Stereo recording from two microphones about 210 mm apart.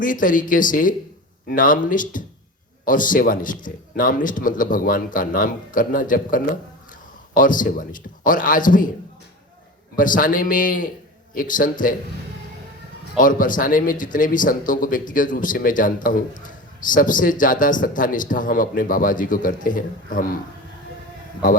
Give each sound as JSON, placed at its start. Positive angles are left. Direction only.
{"t": 0.0, "sound": "a man's voice", "side_deg": 40}
{"t": 9.9, "sound": "a man's voice", "side_deg": 40}
{"t": 13.1, "sound": "a man's voice", "side_deg": 40}